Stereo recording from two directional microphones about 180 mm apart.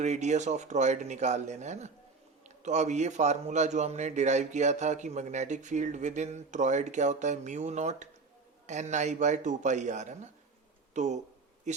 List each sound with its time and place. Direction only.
0.0 s a man's voice: 40° right (ahead or behind)